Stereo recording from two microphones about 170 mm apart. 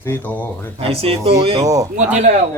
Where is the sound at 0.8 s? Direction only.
35° right (ahead or behind).